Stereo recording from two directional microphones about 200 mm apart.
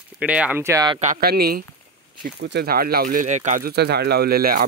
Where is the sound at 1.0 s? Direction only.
45° right (ahead or behind).